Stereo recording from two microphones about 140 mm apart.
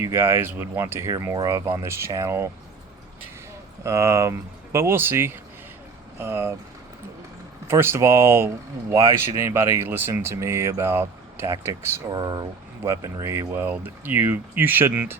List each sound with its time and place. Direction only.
0.0 s speech: 15° right (ahead or behind)
3.8 s speech: 20° right (ahead or behind)
7.7 s speech: 20° right (ahead or behind)
12.1 s speech: 30° right (ahead or behind)